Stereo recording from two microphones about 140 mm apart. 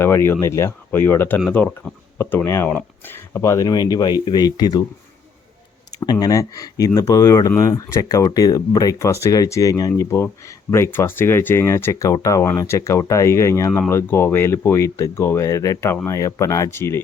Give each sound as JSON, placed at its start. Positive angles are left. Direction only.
{"t": 0.0, "sound": "speech", "side_deg": 20}
{"t": 6.0, "sound": "speech", "side_deg": 25}